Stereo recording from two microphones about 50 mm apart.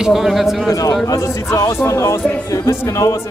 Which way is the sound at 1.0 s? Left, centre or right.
Left.